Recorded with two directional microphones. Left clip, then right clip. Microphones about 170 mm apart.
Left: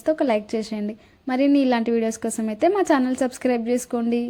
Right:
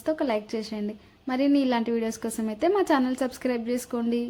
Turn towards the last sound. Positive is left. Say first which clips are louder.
# left 5 dB
turn(degrees=20)  # may be behind; listen again after turning